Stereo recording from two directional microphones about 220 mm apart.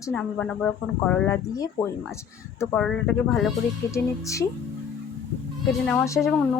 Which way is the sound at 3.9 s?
15° left (ahead or behind).